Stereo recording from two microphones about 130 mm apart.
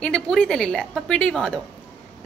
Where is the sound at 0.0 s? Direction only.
5° left (ahead or behind).